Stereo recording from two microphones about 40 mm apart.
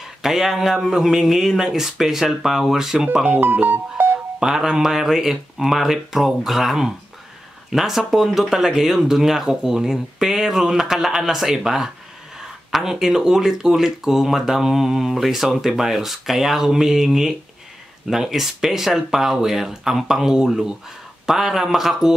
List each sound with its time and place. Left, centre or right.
0.0 s speech: centre
3.3 s speech: right
4.4 s speech: centre